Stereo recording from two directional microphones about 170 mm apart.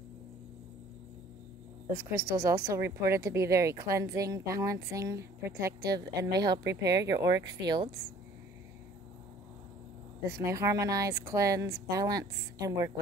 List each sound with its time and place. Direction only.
2.0 s speech: 15° right (ahead or behind)
10.2 s speech: 20° right (ahead or behind)